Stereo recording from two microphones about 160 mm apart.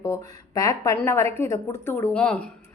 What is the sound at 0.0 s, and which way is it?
Speech, 20° left (ahead or behind).